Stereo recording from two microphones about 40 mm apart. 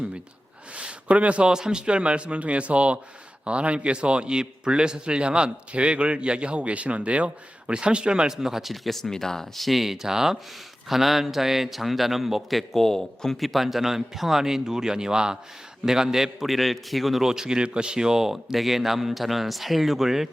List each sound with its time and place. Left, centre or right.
1.0 s a man's voice: right; by 8.7 s centre
8.7 s a man's voice: centre
13.4 s a man's voice: centre
17.2 s speech: centre